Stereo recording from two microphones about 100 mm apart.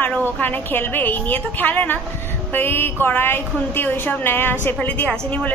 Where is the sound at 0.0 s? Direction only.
20° left (ahead or behind).